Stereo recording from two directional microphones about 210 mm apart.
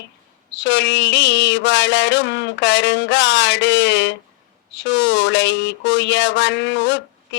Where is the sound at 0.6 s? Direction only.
60° left (ahead or behind).